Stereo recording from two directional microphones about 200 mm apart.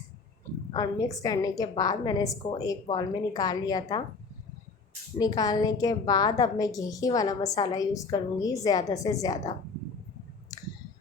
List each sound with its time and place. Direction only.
0.7 s a woman's voice: 20° left (ahead or behind)
5.2 s a woman's voice: 20° left (ahead or behind)